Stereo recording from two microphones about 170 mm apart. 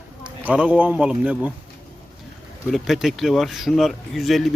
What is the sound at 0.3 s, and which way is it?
Speech, 5° right (ahead or behind).